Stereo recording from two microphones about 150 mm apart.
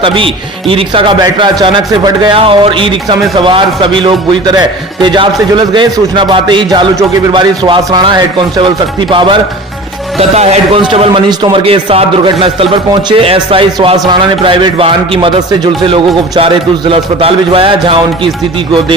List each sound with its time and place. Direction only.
0.0 s a man's voice: 35° right (ahead or behind)
10.2 s a man's voice: 45° right (ahead or behind)
11.3 s a man's voice: 30° right (ahead or behind)
11.6 s a man's voice: 40° right (ahead or behind)